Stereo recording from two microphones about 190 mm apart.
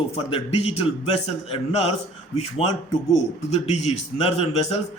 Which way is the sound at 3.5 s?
35° left (ahead or behind).